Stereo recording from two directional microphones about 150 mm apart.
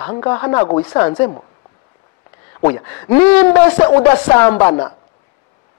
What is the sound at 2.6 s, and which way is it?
A woman's voice, 20° left (ahead or behind).